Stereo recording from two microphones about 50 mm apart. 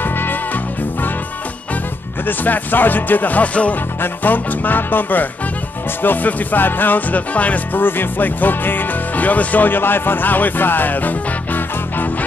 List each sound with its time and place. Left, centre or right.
0.0 s music: left
2.2 s speech: left
7.8 s speech: left